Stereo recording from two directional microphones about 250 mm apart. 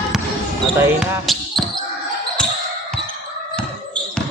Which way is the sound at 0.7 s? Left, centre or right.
Centre.